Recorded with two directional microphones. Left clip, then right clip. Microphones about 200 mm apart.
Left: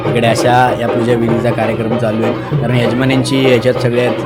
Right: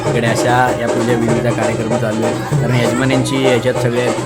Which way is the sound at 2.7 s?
5° left (ahead or behind).